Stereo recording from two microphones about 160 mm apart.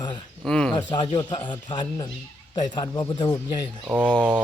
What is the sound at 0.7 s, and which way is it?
Speech, 30° left (ahead or behind).